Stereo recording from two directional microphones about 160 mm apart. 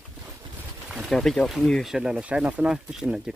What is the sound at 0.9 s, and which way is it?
Speech, centre (ahead or behind).